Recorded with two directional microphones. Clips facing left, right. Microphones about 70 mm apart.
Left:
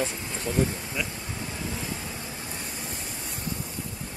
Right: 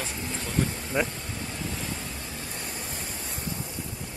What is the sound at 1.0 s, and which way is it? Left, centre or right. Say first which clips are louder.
Speech: right 7 dB; right.